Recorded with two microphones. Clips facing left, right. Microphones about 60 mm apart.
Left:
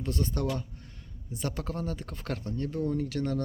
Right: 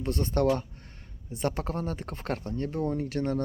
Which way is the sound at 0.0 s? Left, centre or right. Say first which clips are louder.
Right 5 dB; right.